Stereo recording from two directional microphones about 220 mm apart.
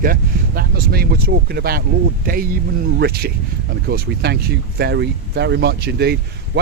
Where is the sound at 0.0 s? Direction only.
40° right (ahead or behind).